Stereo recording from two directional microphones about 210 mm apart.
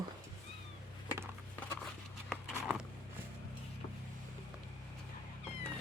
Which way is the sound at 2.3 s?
Centre (ahead or behind).